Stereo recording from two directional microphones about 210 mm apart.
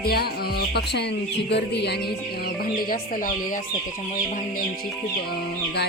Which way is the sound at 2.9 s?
40° left (ahead or behind).